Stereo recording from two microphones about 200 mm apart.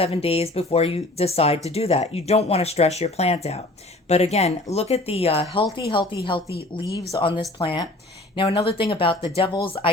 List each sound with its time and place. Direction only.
0.0 s speech: 30° left (ahead or behind)
6.8 s speech: 55° left (ahead or behind)
7.1 s speech: 25° left (ahead or behind)